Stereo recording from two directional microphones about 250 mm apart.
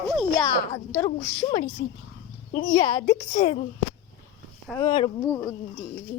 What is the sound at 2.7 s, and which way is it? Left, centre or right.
Speech, centre.